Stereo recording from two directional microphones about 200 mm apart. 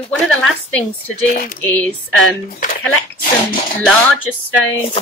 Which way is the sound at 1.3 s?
45° left (ahead or behind).